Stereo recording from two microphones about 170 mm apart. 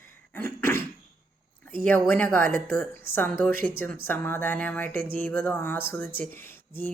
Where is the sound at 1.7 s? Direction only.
10° left (ahead or behind).